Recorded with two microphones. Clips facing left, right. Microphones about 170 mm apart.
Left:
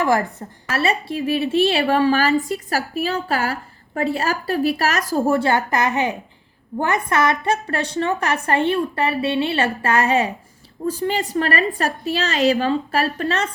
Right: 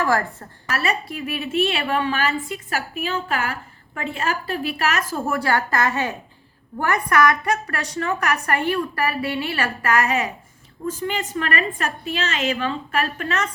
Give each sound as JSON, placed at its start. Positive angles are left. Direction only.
{"t": 0.0, "sound": "a woman's voice", "side_deg": 20}
{"t": 0.8, "sound": "a woman's voice", "side_deg": 30}